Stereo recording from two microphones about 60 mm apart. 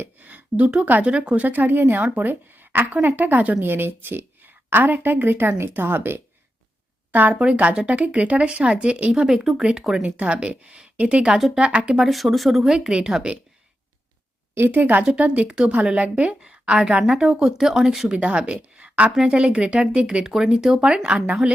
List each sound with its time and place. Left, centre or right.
0.0 s a woman's voice: right
1.5 s a woman's voice: right
3.6 s a woman's voice: right; by 9.2 s centre
9.2 s a woman's voice: centre
10.0 s a woman's voice: centre
11.9 s speech: centre
14.7 s speech: right
15.0 s a woman's voice: centre
18.2 s a woman's voice: centre